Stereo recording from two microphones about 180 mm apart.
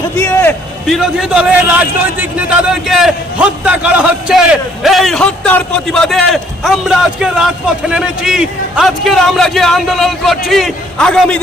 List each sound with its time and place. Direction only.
0.2 s a man's voice: 10° left (ahead or behind)
0.9 s a man's voice: centre (ahead or behind)